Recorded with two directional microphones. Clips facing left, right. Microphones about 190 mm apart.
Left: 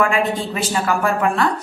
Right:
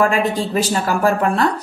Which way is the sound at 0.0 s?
40° right (ahead or behind).